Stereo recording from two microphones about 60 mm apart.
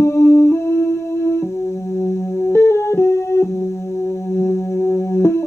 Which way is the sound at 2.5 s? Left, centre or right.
Left.